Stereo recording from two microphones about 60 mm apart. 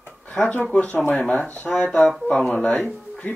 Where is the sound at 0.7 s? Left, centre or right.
Left.